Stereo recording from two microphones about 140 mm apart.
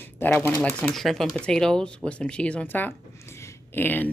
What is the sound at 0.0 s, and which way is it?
Typewriter, 15° left (ahead or behind).